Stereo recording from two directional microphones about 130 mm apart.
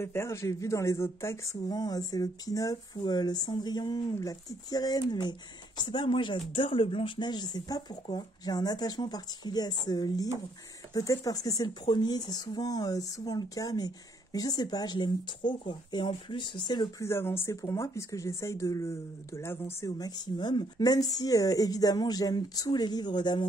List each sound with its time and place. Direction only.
0.0 s speech: 20° left (ahead or behind); by 16.9 s 35° left (ahead or behind)
17.0 s speech: 20° left (ahead or behind)
20.0 s speech: 30° left (ahead or behind)